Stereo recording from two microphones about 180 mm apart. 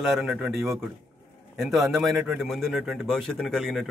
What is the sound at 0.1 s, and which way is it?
A man's voice, 5° right (ahead or behind).